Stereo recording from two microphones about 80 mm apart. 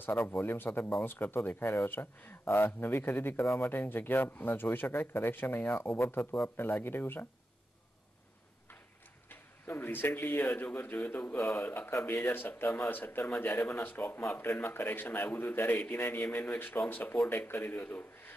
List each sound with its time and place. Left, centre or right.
0.0 s speech: left
9.3 s speech: left